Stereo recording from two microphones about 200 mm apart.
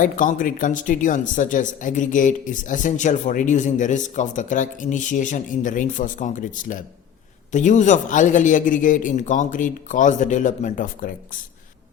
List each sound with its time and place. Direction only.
0.0 s speech: 40° left (ahead or behind)